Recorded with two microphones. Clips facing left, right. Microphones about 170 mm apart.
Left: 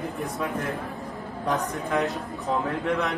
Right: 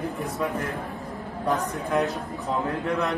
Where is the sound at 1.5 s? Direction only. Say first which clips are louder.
Right 1 dB; centre (ahead or behind).